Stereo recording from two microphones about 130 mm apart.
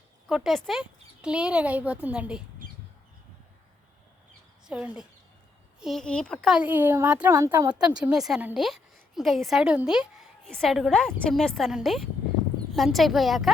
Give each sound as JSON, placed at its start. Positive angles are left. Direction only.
{"t": 0.3, "sound": "speech", "side_deg": -5}
{"t": 4.6, "sound": "a woman's voice", "side_deg": -5}
{"t": 7.7, "sound": "a woman's voice", "side_deg": -5}